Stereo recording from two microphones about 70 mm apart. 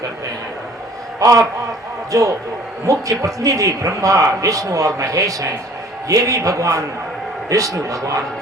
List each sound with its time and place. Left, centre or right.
1.2 s a man's voice: right